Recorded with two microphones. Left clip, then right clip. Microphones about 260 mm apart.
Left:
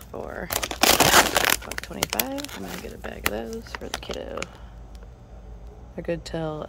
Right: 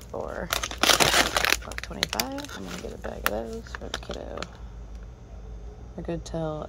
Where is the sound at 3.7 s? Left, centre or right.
Left.